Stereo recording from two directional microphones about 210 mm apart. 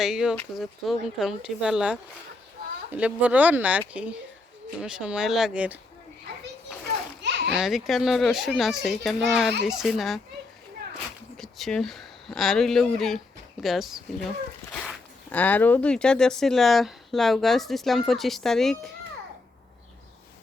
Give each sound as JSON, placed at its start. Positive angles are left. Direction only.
{"t": 0.0, "sound": "speech", "side_deg": -5}
{"t": 7.2, "sound": "children playing", "side_deg": -55}
{"t": 7.5, "sound": "speech", "side_deg": 0}
{"t": 11.3, "sound": "speech", "side_deg": 0}